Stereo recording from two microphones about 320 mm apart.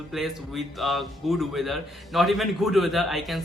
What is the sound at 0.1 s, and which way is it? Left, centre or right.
Speech, centre.